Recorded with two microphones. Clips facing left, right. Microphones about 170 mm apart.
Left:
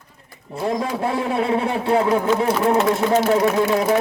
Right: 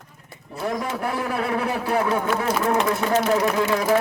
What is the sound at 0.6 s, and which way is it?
Speech, 30° left (ahead or behind).